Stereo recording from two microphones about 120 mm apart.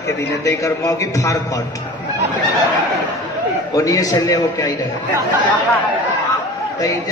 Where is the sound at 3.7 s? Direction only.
30° left (ahead or behind).